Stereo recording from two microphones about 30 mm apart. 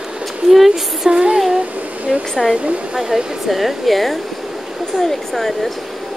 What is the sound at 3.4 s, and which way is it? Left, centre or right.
Speech, centre.